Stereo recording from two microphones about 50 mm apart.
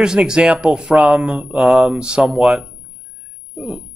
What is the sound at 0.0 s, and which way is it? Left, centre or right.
Speech, centre.